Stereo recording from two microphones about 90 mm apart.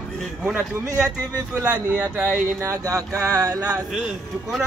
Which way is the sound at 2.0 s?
15° right (ahead or behind).